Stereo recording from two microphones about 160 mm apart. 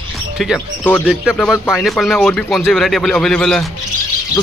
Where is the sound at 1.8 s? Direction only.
Centre (ahead or behind).